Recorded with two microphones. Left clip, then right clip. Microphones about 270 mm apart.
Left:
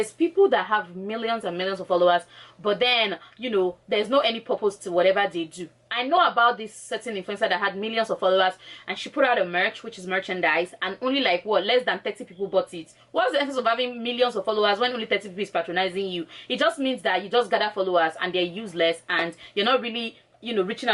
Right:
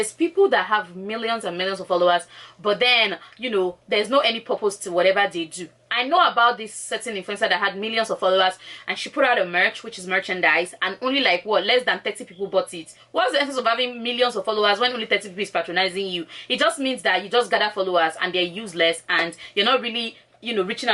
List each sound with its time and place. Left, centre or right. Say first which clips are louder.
0.4 s speech: right 4 dB; centre
4.5 s speech: right 1 dB; centre
4.9 s speech: right 2 dB; centre